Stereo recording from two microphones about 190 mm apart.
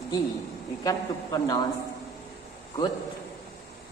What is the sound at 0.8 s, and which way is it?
Speech, 20° left (ahead or behind).